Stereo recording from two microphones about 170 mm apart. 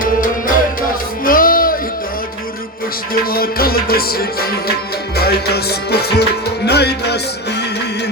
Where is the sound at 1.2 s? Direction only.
55° left (ahead or behind).